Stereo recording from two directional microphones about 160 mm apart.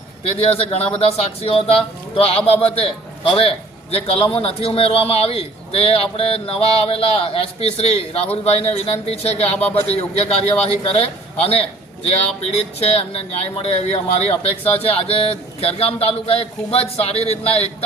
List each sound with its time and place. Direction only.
0.3 s a man's voice: 35° left (ahead or behind)